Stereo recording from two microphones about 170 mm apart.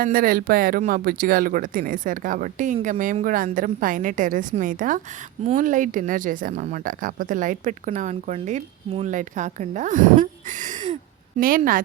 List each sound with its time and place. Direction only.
0.0 s speech: 55° right (ahead or behind)
11.3 s speech: 55° right (ahead or behind)